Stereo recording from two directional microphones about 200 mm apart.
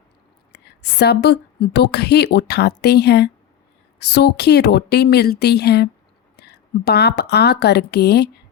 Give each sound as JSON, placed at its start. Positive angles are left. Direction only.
{"t": 0.5, "sound": "a woman's voice", "side_deg": 55}